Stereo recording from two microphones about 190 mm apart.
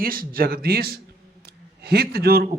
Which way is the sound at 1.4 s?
55° right (ahead or behind).